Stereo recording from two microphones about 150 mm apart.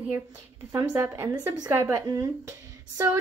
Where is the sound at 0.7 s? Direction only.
15° right (ahead or behind).